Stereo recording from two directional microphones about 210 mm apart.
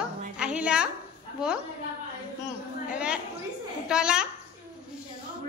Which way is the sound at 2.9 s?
5° right (ahead or behind).